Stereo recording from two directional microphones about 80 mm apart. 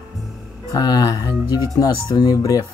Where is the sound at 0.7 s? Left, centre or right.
Left.